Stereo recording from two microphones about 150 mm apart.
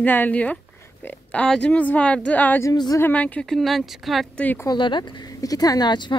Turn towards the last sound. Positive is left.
turn(degrees=30)  # may be behind; listen again after turning